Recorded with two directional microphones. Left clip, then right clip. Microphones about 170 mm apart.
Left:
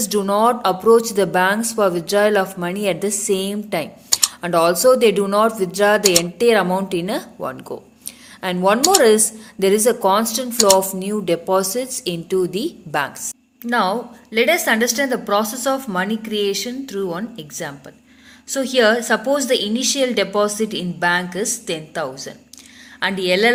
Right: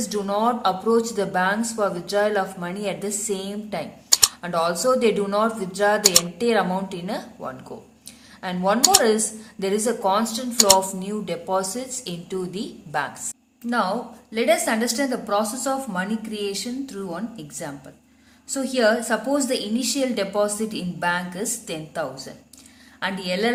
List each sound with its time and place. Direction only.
0.0 s speech: 40° left (ahead or behind)
6.0 s speech: centre (ahead or behind)
6.4 s speech: 35° left (ahead or behind)
8.8 s speech: centre (ahead or behind)
9.0 s speech: 40° left (ahead or behind)
13.7 s a woman's voice: 25° left (ahead or behind)